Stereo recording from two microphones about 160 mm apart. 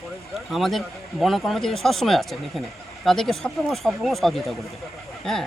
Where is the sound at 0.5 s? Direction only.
Centre (ahead or behind).